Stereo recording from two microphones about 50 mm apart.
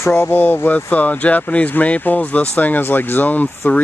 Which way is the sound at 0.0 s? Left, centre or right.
Left.